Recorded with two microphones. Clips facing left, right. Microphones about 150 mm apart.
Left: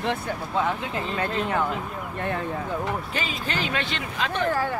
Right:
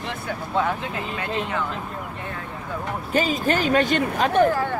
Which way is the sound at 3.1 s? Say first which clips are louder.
Right 8 dB; 40° right (ahead or behind).